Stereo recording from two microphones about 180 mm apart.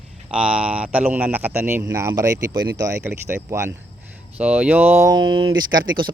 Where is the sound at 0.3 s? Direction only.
5° right (ahead or behind).